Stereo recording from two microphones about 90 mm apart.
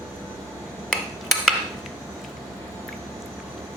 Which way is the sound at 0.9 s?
Centre (ahead or behind).